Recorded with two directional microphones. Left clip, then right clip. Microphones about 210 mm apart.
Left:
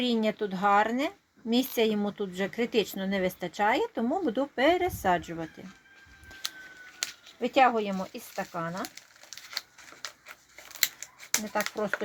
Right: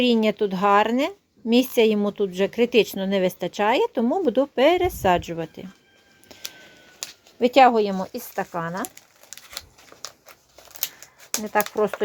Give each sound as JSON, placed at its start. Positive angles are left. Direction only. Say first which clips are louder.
{"t": 0.0, "sound": "speech", "louder": "right 8 dB", "side_deg": -40}
{"t": 7.3, "sound": "speech", "louder": "right 8 dB", "side_deg": -45}
{"t": 11.5, "sound": "speech", "louder": "right 11 dB", "side_deg": -45}